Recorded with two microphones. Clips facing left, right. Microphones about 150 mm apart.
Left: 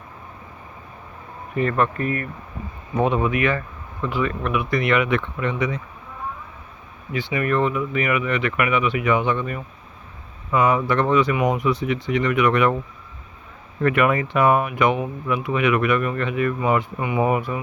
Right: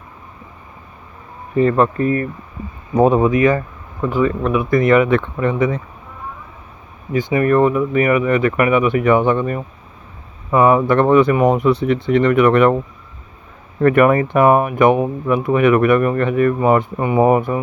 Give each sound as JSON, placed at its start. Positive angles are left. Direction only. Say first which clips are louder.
{"t": 1.5, "sound": "speech", "louder": "right 7 dB", "side_deg": -30}
{"t": 4.6, "sound": "speech", "louder": "right 8 dB", "side_deg": -45}
{"t": 7.1, "sound": "speech", "louder": "right 7 dB", "side_deg": -40}
{"t": 13.8, "sound": "speech", "louder": "right 7 dB", "side_deg": -40}